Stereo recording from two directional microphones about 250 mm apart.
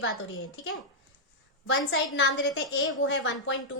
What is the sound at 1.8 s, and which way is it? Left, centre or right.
A woman's voice, left.